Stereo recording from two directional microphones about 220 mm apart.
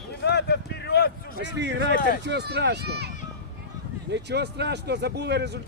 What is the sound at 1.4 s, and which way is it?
Speech, 50° right (ahead or behind).